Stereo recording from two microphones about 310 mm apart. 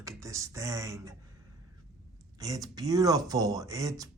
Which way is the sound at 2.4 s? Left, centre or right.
Centre.